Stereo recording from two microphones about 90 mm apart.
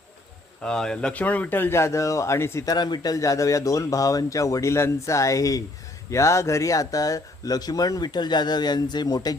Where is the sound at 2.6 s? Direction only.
50° left (ahead or behind).